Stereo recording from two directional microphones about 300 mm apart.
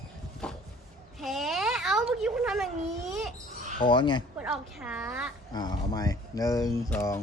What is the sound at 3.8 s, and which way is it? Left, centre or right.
Speech, centre.